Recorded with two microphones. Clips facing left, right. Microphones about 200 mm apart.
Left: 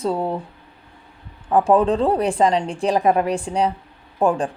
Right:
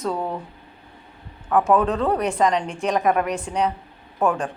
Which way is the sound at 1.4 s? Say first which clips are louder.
Left 3 dB; 30° left (ahead or behind).